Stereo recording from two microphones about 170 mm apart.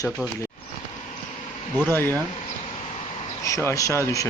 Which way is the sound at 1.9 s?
10° left (ahead or behind).